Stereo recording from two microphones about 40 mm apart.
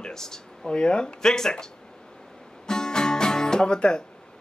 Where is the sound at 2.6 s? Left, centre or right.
Centre.